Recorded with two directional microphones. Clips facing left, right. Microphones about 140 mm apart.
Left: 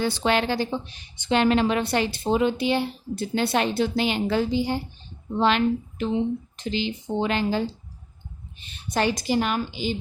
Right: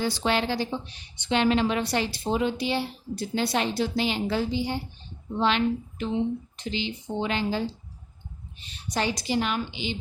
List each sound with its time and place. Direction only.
0.0 s a woman's voice: 55° left (ahead or behind)
7.2 s a woman's voice: 50° left (ahead or behind)
8.6 s a woman's voice: 55° left (ahead or behind)